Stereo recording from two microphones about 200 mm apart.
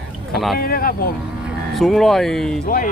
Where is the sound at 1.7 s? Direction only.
Centre (ahead or behind).